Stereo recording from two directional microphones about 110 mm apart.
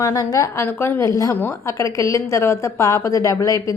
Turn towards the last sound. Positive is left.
turn(degrees=30)  # may be behind; listen again after turning